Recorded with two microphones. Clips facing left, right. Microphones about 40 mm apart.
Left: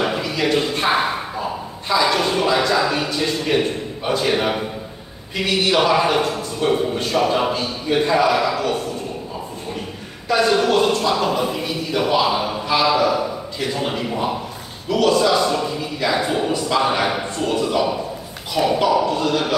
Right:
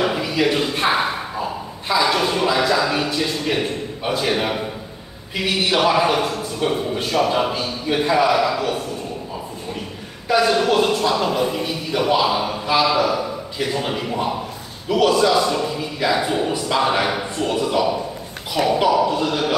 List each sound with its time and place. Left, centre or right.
0.0 s a sound: centre
1.9 s a man's voice: centre
10.3 s a man's voice: centre
19.0 s a man's voice: centre